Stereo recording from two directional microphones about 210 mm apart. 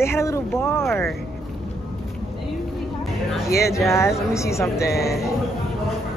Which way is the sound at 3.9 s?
15° left (ahead or behind).